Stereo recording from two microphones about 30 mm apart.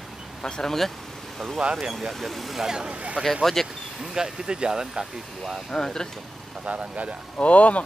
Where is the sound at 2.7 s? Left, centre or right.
Right.